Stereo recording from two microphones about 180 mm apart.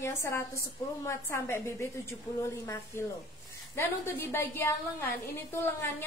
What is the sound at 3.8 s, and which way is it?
A woman's voice, 15° left (ahead or behind).